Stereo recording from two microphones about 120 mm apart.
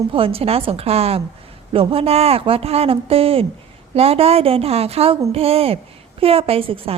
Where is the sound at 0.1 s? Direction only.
50° right (ahead or behind).